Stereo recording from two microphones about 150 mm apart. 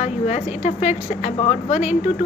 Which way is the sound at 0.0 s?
55° left (ahead or behind).